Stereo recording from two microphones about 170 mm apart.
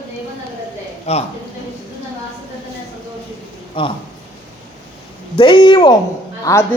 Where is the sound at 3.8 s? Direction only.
30° left (ahead or behind).